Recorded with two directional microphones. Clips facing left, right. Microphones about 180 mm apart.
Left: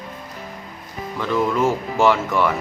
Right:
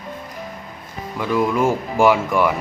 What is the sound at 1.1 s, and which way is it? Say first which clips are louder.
Speech: right 1 dB; 10° right (ahead or behind).